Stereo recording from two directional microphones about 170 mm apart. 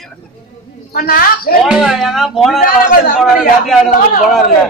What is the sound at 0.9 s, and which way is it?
Speech, 60° left (ahead or behind).